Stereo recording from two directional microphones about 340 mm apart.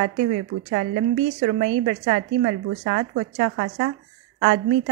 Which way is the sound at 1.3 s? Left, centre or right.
Right.